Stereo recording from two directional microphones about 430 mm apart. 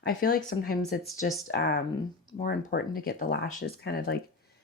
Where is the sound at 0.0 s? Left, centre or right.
Left.